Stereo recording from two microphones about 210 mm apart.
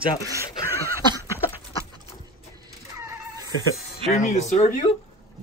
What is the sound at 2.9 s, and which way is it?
Neigh, 15° right (ahead or behind).